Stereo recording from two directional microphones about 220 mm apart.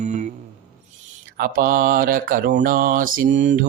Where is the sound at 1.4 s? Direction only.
40° right (ahead or behind).